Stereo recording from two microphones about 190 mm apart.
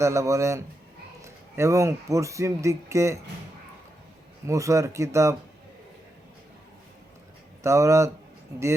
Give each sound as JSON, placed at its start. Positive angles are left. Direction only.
{"t": 0.0, "sound": "speech", "side_deg": -15}
{"t": 4.4, "sound": "speech", "side_deg": -15}
{"t": 7.6, "sound": "speech", "side_deg": -15}